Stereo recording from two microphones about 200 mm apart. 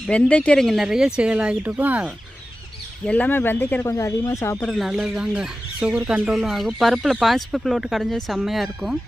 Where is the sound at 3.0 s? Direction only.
5° left (ahead or behind).